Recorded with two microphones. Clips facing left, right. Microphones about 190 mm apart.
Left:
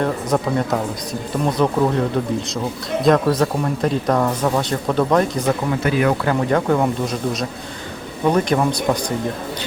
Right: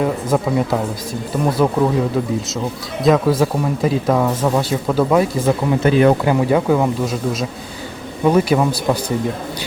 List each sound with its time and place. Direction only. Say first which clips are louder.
0.0 s speech: right 2 dB; 5° right (ahead or behind)
5.8 s speech: right 6 dB; 30° right (ahead or behind)
6.2 s speech: right 3 dB; 5° right (ahead or behind)